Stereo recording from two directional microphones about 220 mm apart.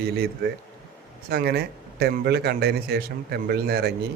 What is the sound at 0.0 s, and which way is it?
A man's voice, 45° right (ahead or behind).